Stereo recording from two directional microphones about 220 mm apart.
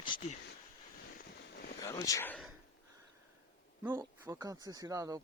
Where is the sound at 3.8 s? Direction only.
10° right (ahead or behind).